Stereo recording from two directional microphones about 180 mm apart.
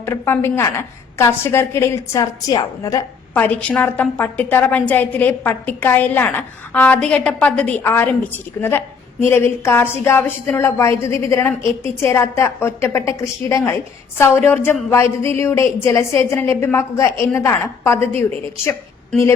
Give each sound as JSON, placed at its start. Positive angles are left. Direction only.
{"t": 0.0, "sound": "a woman's voice", "side_deg": 15}
{"t": 3.3, "sound": "a woman's voice", "side_deg": 10}